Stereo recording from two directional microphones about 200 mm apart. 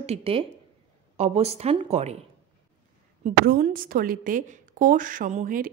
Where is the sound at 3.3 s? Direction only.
40° right (ahead or behind).